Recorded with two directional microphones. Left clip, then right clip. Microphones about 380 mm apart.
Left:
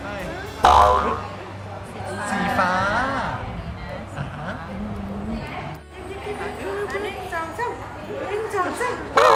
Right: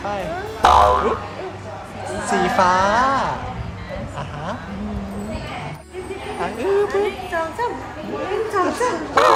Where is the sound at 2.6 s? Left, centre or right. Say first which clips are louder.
Right 6 dB; centre.